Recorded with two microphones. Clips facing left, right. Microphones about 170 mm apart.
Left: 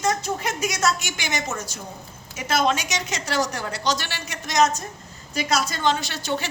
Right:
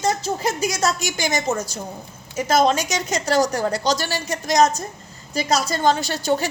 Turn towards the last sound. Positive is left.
turn(degrees=-40)  # may be behind; listen again after turning